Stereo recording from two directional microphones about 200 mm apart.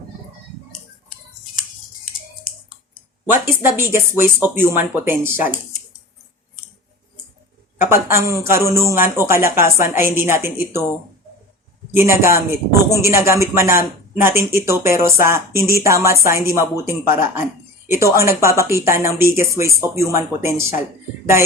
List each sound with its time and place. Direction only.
2.0 s scissors: 45° left (ahead or behind)
3.4 s a woman's voice: 10° right (ahead or behind)
8.0 s a woman's voice: 15° right (ahead or behind)
11.9 s a woman's voice: 15° right (ahead or behind)